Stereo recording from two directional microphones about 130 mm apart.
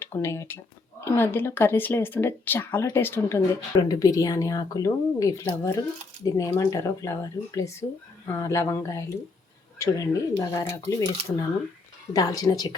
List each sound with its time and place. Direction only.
0.0 s speech: 20° left (ahead or behind)